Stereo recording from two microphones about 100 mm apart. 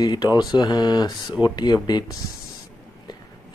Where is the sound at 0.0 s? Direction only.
45° left (ahead or behind).